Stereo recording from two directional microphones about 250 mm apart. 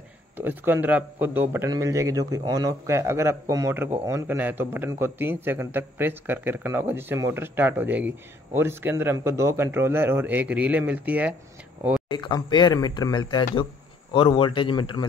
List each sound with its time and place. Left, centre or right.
0.4 s a man's voice: centre
12.1 s a man's voice: centre